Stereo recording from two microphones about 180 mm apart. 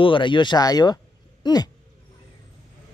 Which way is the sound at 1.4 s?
20° left (ahead or behind).